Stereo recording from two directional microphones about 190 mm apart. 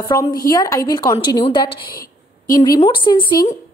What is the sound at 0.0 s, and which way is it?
A woman's voice, 20° left (ahead or behind).